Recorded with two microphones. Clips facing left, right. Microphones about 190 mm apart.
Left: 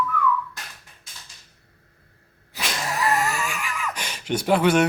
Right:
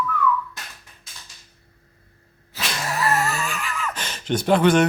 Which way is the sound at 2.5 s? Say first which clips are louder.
Right 1 dB; 15° left (ahead or behind).